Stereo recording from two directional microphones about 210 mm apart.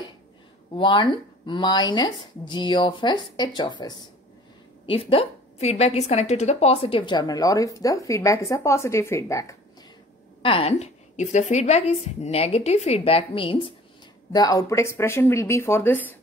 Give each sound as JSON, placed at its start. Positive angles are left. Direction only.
{"t": 0.7, "sound": "a woman's voice", "side_deg": 25}
{"t": 10.4, "sound": "a woman's voice", "side_deg": 25}